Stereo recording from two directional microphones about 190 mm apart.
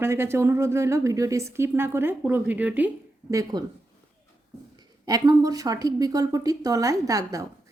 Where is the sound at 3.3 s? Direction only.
20° right (ahead or behind).